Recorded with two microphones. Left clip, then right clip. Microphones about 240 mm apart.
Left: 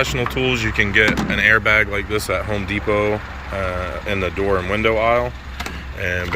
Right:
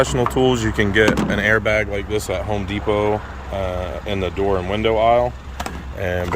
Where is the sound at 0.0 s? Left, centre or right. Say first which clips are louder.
Right 3 dB; right.